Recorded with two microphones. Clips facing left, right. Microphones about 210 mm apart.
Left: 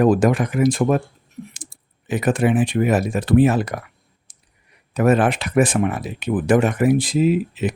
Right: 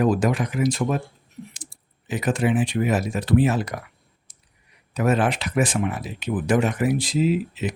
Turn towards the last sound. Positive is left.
turn(degrees=55)  # may be behind; listen again after turning